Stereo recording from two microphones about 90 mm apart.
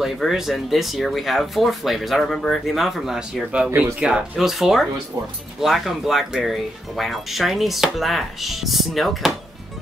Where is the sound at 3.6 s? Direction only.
25° right (ahead or behind).